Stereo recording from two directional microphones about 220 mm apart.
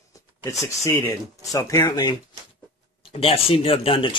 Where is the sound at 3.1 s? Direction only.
25° left (ahead or behind).